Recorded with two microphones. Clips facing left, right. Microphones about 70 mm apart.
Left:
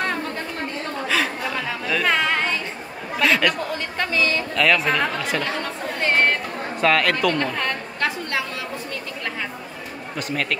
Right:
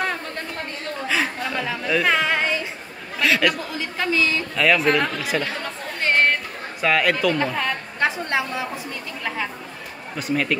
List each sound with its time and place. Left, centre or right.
1.4 s chatter: centre
3.2 s a woman's voice: centre
5.5 s chatter: centre
6.8 s a woman's voice: centre
8.0 s a woman's voice: right
10.1 s a woman's voice: centre